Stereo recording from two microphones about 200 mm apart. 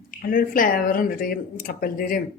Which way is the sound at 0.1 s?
45° left (ahead or behind).